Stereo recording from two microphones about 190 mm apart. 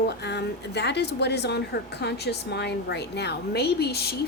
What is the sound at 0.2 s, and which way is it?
A woman's voice, 60° left (ahead or behind).